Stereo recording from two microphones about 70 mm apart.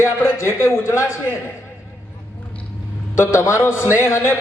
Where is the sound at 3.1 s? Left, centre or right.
Left.